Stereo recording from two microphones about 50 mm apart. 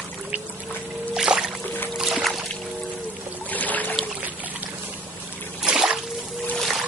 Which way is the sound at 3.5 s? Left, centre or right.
Left.